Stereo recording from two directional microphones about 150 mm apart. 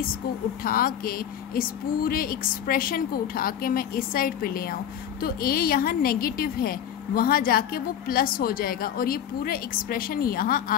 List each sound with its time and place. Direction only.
0.7 s a woman's voice: 75° left (ahead or behind)